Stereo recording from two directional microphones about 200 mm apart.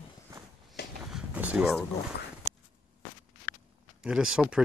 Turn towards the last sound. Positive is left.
turn(degrees=-5)  # may be behind; listen again after turning